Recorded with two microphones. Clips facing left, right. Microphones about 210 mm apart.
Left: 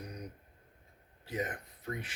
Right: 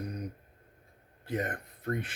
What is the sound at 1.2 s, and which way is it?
Speech, 55° right (ahead or behind).